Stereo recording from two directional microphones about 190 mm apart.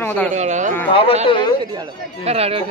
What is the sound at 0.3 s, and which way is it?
Speech, 40° right (ahead or behind).